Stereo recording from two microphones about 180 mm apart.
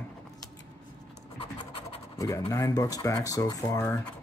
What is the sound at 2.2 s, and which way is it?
Speech, 15° left (ahead or behind).